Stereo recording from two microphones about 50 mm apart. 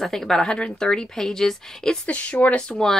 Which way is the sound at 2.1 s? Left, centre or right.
Left.